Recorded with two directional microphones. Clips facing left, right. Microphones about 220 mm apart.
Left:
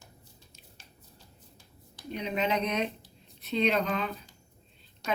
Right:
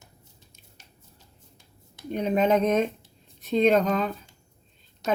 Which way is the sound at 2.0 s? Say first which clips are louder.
Right 8 dB; 50° right (ahead or behind).